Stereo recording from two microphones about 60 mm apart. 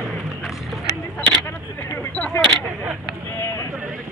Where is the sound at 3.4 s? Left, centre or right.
Left.